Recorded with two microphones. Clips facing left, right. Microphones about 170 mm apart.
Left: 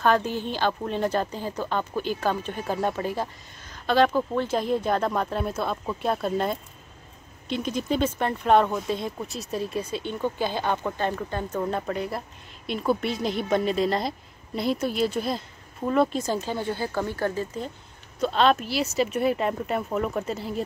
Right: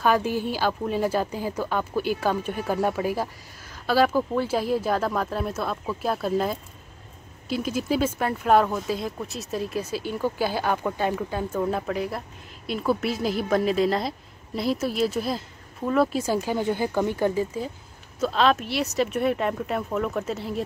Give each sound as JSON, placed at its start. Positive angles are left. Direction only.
{"t": 0.0, "sound": "speech", "side_deg": -10}
{"t": 18.2, "sound": "speech", "side_deg": 0}